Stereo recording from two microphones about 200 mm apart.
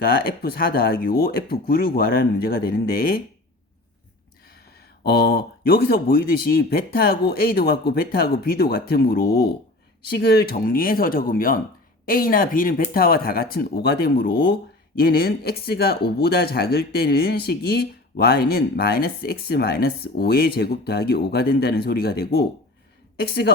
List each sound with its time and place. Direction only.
0.3 s speech: 50° left (ahead or behind)
5.0 s a woman's voice: 55° left (ahead or behind)